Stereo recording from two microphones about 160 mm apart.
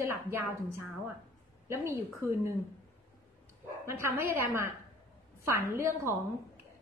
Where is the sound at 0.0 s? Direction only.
15° right (ahead or behind).